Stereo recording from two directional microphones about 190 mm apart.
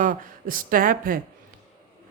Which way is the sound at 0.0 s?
45° right (ahead or behind).